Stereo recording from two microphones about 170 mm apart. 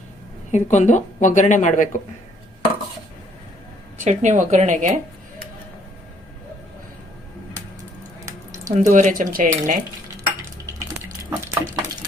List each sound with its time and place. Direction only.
0.5 s speech: 45° left (ahead or behind)
4.0 s speech: 45° right (ahead or behind)
8.2 s a sound: 20° right (ahead or behind)
8.9 s speech: 45° right (ahead or behind)
11.3 s stir: 20° right (ahead or behind)